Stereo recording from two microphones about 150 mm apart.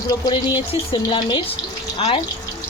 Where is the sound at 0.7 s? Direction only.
35° left (ahead or behind).